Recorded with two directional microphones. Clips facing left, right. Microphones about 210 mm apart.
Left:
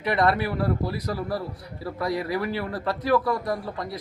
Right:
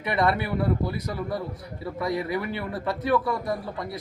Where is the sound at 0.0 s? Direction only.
Centre (ahead or behind).